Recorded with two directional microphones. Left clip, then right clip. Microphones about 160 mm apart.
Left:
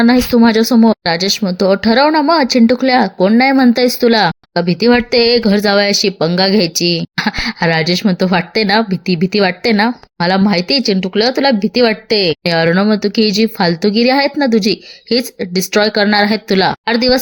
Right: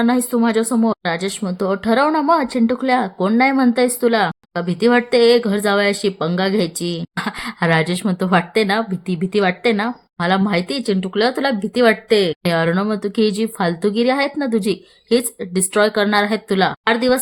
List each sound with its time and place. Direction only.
0.0 s a woman's voice: 15° left (ahead or behind)